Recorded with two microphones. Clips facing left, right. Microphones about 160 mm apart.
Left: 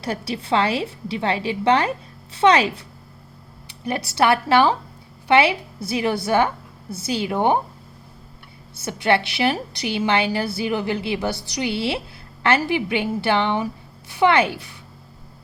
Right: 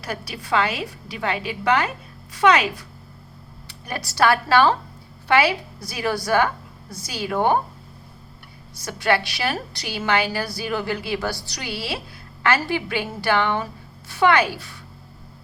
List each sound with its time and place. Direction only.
0.0 s a woman's voice: 30° left (ahead or behind)
8.7 s a woman's voice: 25° left (ahead or behind)